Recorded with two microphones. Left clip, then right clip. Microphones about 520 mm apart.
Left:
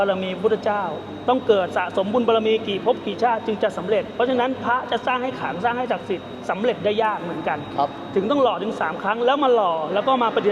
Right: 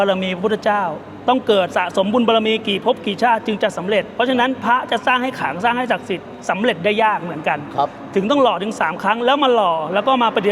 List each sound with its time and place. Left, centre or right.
0.0 s a man's voice: right